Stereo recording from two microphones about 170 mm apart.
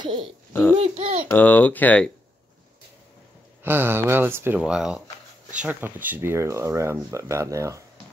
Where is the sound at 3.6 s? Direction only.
15° right (ahead or behind).